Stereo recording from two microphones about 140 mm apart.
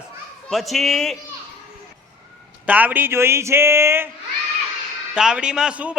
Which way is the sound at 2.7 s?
10° right (ahead or behind).